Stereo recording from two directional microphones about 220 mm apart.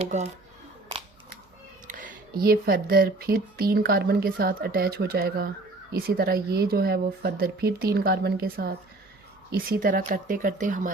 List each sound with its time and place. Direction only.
0.0 s speech: 30° right (ahead or behind)
1.9 s speech: 40° right (ahead or behind)